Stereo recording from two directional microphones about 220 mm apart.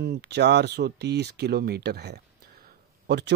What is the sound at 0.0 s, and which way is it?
Speech, 50° right (ahead or behind).